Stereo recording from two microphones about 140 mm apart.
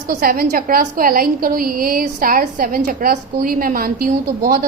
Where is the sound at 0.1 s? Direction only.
90° right.